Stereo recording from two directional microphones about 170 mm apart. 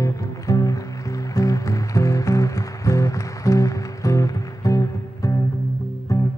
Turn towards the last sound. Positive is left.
turn(degrees=20)  # may be behind; listen again after turning